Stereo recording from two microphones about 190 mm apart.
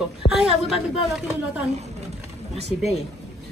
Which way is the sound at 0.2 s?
20° left (ahead or behind).